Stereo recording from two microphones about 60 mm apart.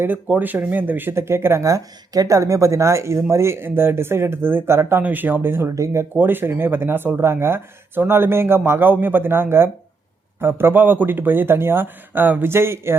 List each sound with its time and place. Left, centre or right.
0.3 s speech: right
1.1 s speech: right
1.6 s speech: right
5.0 s speech: right
5.7 s speech: right
6.1 s speech: right